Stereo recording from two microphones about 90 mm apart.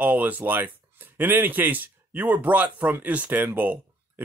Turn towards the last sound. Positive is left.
turn(degrees=-20)  # may be behind; listen again after turning